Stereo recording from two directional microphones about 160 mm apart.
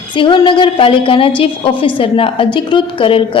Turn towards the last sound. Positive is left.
turn(degrees=35)  # may be behind; listen again after turning